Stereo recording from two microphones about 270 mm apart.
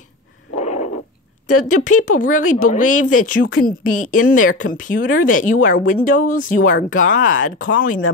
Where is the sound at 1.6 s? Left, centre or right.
Left.